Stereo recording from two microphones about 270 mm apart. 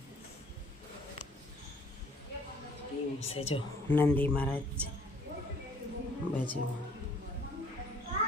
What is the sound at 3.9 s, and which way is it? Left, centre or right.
Speech, centre.